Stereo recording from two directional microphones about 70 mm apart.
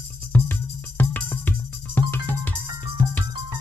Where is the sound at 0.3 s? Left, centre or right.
Left.